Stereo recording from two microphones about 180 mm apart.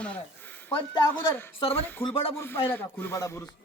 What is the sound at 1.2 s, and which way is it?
Speech, 10° left (ahead or behind).